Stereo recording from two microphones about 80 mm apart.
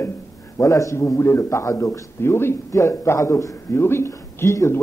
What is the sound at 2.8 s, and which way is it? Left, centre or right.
A man's voice, left.